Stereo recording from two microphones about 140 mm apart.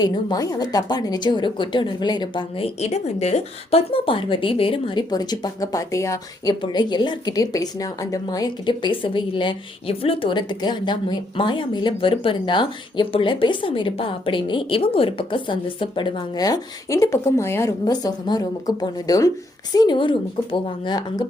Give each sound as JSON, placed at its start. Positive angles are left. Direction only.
{"t": 0.0, "sound": "speech", "side_deg": 30}
{"t": 2.8, "sound": "speech", "side_deg": 50}
{"t": 5.1, "sound": "speech", "side_deg": 30}